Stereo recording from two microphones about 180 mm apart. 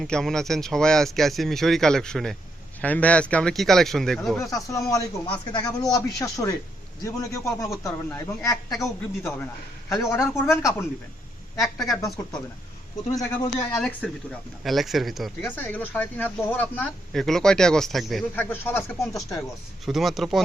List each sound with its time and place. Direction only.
0.0 s speech: centre (ahead or behind)
4.4 s a man's voice: 20° left (ahead or behind)
11.6 s speech: centre (ahead or behind)
13.7 s speech: 10° left (ahead or behind)
15.5 s speech: 10° left (ahead or behind)
19.8 s speech: centre (ahead or behind)